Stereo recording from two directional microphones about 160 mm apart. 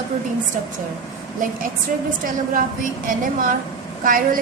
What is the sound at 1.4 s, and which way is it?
Speech, 60° right (ahead or behind).